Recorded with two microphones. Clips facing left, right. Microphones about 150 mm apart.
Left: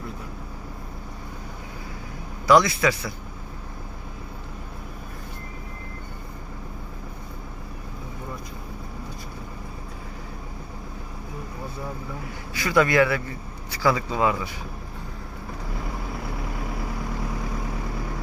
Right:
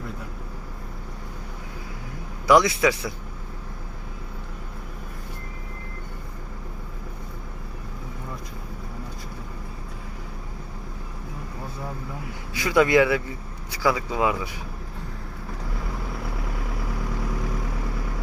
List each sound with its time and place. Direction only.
2.5 s speech: 15° right (ahead or behind)
12.5 s speech: 15° right (ahead or behind)